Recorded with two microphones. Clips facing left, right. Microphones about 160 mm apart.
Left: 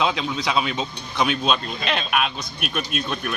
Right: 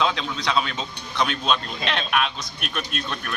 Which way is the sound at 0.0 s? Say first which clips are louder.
Left 1 dB; 10° left (ahead or behind).